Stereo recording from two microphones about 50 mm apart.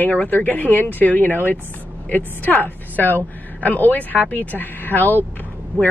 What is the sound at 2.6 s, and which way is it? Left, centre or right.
Speech, left.